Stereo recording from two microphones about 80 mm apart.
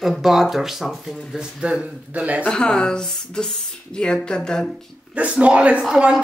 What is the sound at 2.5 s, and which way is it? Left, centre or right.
Speech, centre.